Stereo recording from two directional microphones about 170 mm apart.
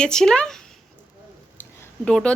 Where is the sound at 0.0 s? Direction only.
5° left (ahead or behind).